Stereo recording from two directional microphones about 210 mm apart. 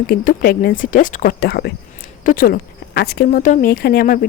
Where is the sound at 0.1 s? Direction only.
45° left (ahead or behind).